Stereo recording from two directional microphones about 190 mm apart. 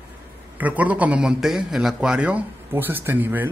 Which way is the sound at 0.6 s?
10° right (ahead or behind).